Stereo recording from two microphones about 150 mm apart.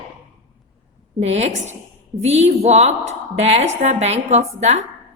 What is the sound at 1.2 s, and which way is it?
Speech, 45° right (ahead or behind).